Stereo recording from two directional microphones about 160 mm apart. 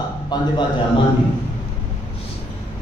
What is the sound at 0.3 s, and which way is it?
Speech, 25° left (ahead or behind).